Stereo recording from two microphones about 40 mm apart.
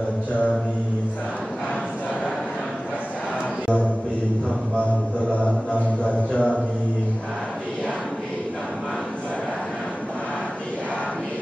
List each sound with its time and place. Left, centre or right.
5.3 s music: left